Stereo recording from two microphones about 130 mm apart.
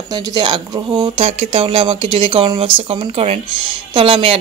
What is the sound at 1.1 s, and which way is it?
Speech, 55° right (ahead or behind).